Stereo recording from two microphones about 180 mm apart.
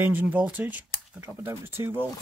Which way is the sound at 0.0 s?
10° right (ahead or behind).